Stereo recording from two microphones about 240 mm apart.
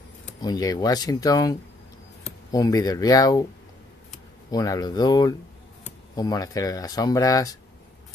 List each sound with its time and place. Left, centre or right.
0.4 s speech: centre
4.5 s speech: centre